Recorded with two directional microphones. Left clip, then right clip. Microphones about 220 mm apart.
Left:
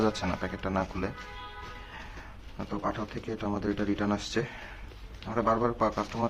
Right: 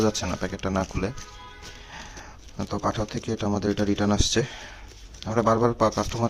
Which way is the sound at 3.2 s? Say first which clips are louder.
Right 6 dB; 50° right (ahead or behind).